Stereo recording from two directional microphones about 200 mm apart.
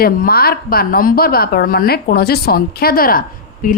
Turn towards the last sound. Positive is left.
turn(degrees=40)  # may be behind; listen again after turning